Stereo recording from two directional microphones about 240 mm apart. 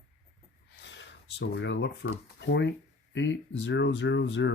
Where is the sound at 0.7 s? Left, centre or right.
Left.